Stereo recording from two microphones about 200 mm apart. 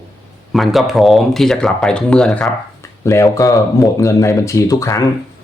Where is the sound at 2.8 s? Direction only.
15° left (ahead or behind).